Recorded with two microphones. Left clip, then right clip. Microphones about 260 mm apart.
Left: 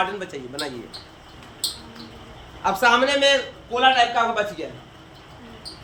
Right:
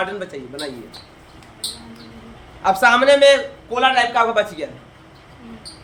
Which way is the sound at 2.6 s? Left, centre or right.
Centre.